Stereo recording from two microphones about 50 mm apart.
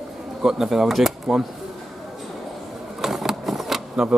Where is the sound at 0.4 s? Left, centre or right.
Centre.